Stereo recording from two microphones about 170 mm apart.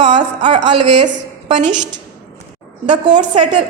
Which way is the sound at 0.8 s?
45° right (ahead or behind).